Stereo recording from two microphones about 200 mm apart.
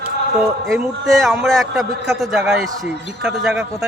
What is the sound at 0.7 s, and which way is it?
A man's voice, centre (ahead or behind).